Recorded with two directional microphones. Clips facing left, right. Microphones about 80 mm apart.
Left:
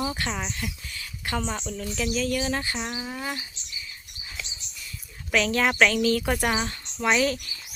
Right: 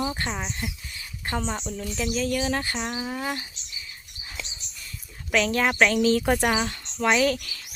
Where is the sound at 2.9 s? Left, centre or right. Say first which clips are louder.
Right 3 dB; centre.